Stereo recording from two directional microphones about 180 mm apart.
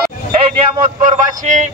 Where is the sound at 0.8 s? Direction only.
45° right (ahead or behind).